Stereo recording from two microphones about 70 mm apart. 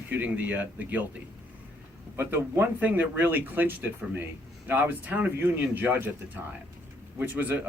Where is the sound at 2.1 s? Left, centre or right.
Right.